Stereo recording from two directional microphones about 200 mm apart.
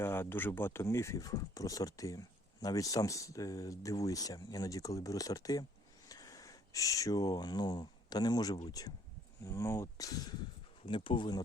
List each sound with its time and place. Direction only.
0.0 s speech: 10° left (ahead or behind)